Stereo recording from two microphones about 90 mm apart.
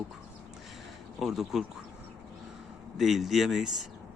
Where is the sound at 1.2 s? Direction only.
5° right (ahead or behind).